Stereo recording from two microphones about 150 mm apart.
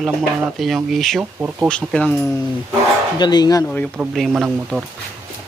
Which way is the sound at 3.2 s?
30° left (ahead or behind).